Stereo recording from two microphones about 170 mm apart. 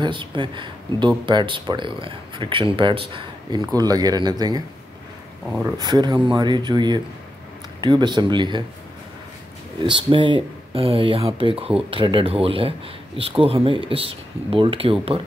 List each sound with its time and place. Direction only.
0.0 s speech: 30° right (ahead or behind)
9.8 s speech: 30° right (ahead or behind)